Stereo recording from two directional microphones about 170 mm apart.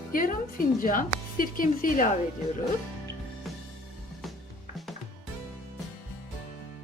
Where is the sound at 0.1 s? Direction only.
55° left (ahead or behind).